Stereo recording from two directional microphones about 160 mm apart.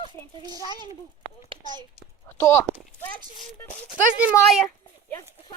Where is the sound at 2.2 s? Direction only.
15° left (ahead or behind).